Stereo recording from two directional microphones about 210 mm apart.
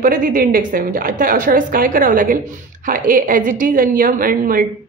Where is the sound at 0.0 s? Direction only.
40° right (ahead or behind).